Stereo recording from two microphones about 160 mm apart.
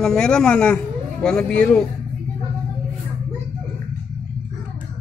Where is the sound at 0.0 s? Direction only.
5° left (ahead or behind).